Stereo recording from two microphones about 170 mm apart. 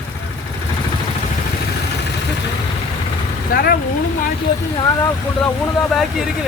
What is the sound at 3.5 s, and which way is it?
Speech, 60° left (ahead or behind).